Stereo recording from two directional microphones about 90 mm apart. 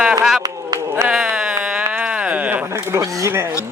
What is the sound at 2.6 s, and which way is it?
Speech, 30° right (ahead or behind).